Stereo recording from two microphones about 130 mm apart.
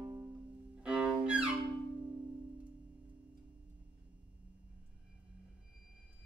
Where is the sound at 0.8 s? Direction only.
10° right (ahead or behind).